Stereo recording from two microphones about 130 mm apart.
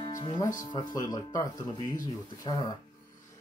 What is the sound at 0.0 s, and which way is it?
Music, 35° left (ahead or behind).